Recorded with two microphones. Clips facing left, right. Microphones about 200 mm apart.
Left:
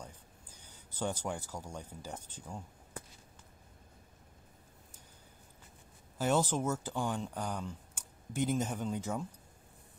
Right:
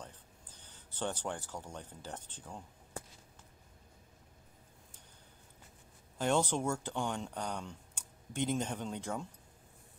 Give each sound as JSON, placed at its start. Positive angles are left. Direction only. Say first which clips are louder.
{"t": 0.0, "sound": "speech", "louder": "left 1 dB", "side_deg": 10}
{"t": 6.1, "sound": "speech", "louder": "left 1 dB", "side_deg": 5}